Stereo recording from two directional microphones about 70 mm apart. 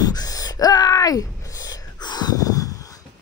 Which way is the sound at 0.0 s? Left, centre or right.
Left.